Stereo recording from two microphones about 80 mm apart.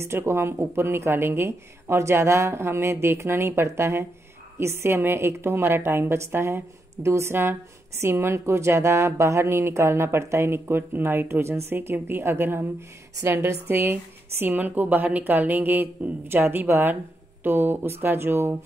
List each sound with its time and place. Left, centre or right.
0.0 s a woman's voice: right